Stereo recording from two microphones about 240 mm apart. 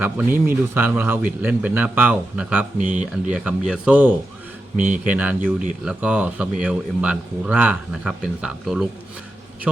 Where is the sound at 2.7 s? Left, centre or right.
Right.